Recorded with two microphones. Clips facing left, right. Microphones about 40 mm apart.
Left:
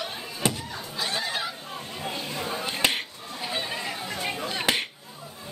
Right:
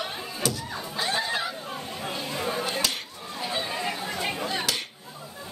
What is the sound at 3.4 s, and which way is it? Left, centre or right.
Chatter, centre.